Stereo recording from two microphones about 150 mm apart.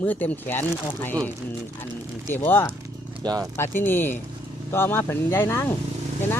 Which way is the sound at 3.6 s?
15° left (ahead or behind).